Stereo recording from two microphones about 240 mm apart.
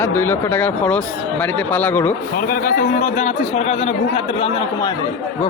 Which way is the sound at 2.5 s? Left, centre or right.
Left.